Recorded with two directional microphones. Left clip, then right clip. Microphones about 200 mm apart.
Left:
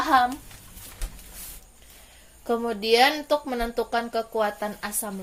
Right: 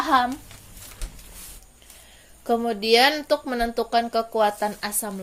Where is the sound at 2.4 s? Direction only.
25° right (ahead or behind).